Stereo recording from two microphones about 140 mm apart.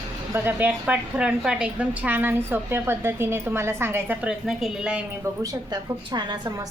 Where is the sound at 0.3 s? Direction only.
15° right (ahead or behind).